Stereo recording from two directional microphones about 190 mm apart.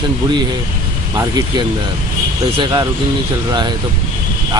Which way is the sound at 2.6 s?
25° right (ahead or behind).